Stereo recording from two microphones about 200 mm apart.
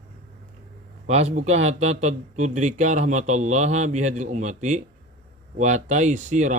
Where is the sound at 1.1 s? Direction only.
35° right (ahead or behind).